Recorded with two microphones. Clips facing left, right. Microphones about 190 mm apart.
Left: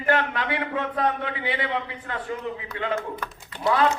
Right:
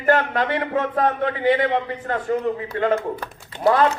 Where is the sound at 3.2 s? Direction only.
30° right (ahead or behind).